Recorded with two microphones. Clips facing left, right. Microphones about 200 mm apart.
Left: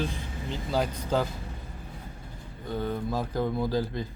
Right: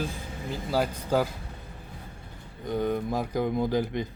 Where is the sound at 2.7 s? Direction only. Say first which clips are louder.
Right 3 dB; 15° right (ahead or behind).